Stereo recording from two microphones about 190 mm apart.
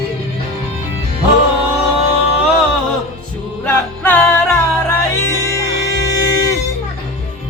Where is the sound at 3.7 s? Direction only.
10° left (ahead or behind).